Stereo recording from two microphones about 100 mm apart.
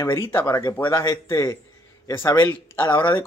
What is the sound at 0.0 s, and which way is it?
Speech, 25° left (ahead or behind).